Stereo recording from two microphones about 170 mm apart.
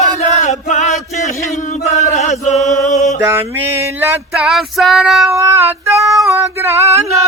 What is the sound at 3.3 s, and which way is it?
Female singing, 15° right (ahead or behind).